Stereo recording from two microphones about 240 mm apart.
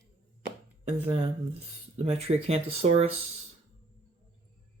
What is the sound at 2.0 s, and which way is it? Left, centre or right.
Speech, right.